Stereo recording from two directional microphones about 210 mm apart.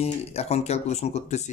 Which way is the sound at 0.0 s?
30° left (ahead or behind).